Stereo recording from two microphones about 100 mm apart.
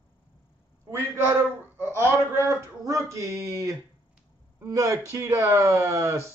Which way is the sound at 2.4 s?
25° right (ahead or behind).